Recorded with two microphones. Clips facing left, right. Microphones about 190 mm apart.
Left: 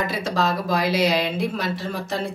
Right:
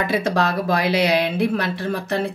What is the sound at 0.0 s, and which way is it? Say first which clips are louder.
Speech: right 3 dB; 60° right (ahead or behind).